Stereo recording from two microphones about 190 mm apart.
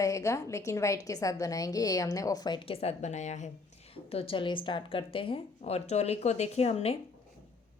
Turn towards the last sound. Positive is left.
turn(degrees=35)  # may be behind; listen again after turning